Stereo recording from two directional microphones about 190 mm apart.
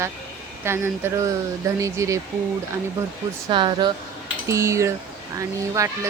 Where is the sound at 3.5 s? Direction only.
25° right (ahead or behind).